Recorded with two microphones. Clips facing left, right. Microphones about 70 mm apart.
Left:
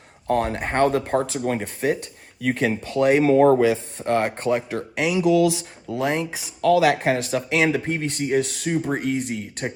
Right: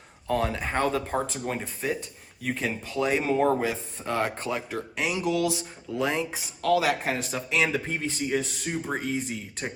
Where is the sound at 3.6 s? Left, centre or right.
Left.